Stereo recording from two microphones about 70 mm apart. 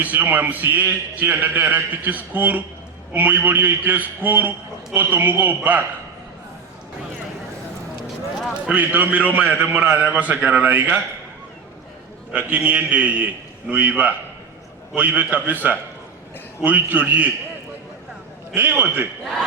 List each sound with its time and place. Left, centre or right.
0.0 s a man's voice: right
8.7 s a man's voice: right
12.3 s a man's voice: right
18.5 s a man's voice: right